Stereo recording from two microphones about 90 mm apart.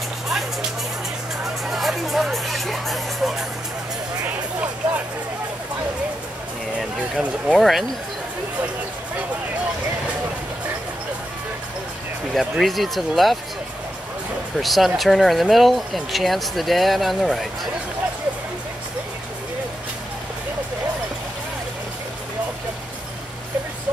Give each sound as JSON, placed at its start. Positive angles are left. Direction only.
{"t": 0.3, "sound": "music", "side_deg": -5}
{"t": 4.2, "sound": "vehicle", "side_deg": -15}
{"t": 6.8, "sound": "speech", "side_deg": -5}
{"t": 12.4, "sound": "speech", "side_deg": 0}
{"t": 14.6, "sound": "speech", "side_deg": 0}